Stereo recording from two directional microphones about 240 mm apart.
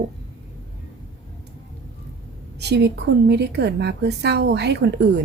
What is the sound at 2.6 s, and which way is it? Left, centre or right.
A woman's voice, right.